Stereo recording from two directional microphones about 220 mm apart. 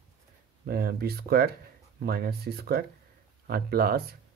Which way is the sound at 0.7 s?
45° right (ahead or behind).